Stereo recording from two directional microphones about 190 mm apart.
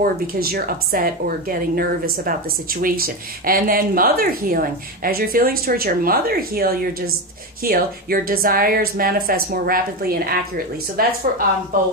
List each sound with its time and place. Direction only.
0.0 s a woman's voice: 50° right (ahead or behind)